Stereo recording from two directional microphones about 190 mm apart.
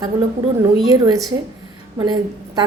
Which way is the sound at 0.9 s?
20° right (ahead or behind).